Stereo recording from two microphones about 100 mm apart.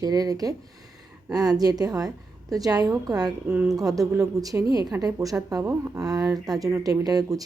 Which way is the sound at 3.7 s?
35° right (ahead or behind).